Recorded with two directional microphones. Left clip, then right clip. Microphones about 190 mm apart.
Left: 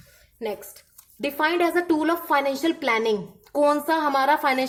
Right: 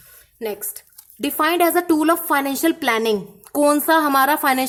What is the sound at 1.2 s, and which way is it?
A woman's voice, 30° right (ahead or behind).